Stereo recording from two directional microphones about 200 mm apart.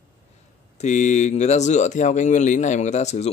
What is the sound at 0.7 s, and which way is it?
Speech, 35° left (ahead or behind).